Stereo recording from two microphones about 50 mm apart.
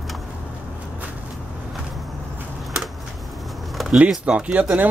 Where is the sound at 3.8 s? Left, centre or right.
Centre.